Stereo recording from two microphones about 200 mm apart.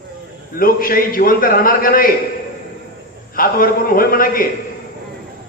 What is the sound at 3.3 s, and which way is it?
A man's voice, 45° left (ahead or behind).